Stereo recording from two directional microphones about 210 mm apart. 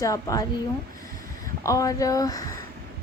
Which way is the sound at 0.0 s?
15° left (ahead or behind).